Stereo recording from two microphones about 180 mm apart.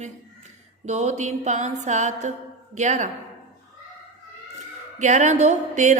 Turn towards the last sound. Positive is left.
turn(degrees=-40)  # may be behind; listen again after turning